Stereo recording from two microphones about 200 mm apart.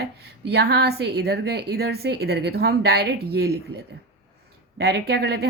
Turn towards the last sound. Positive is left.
turn(degrees=-55)  # may be behind; listen again after turning